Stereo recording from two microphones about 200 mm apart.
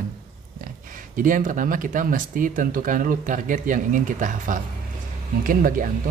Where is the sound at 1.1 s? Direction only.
40° right (ahead or behind).